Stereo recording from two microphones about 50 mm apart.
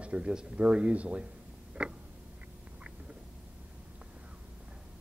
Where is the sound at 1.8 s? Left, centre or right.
Centre.